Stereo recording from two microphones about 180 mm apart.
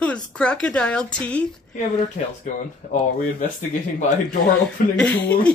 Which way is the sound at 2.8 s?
45° left (ahead or behind).